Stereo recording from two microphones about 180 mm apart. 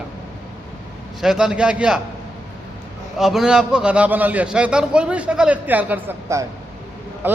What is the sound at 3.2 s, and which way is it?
A man's voice, centre (ahead or behind).